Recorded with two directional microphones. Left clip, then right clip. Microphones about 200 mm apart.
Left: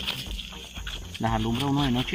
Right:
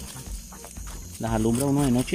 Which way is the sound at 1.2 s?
10° right (ahead or behind).